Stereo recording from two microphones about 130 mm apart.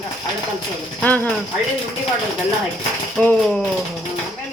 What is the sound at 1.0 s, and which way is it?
Speech, 10° left (ahead or behind).